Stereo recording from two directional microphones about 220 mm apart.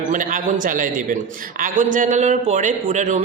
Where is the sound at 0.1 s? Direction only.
35° right (ahead or behind).